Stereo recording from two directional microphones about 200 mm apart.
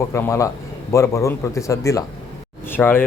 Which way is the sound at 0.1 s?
15° left (ahead or behind).